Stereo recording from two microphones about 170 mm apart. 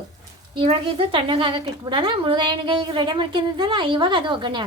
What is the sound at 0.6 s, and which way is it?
A woman's voice, 30° right (ahead or behind).